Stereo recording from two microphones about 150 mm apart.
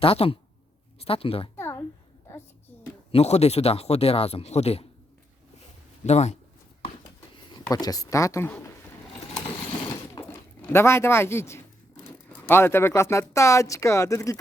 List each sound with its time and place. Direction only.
0.0 s speech: 40° left (ahead or behind)
1.5 s a sound: 15° left (ahead or behind)
3.1 s speech: 45° left (ahead or behind)
6.1 s speech: 45° left (ahead or behind)
7.7 s speech: 25° left (ahead or behind)
10.2 s a sound: 25° left (ahead or behind)
10.7 s speech: 15° left (ahead or behind)